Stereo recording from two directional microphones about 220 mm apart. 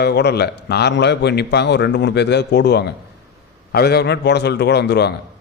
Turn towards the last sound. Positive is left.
turn(degrees=50)  # may be behind; listen again after turning